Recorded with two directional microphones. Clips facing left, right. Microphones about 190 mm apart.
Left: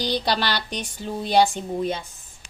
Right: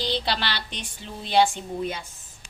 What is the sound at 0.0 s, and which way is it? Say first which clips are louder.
A woman's voice: left 3 dB; 45° left (ahead or behind).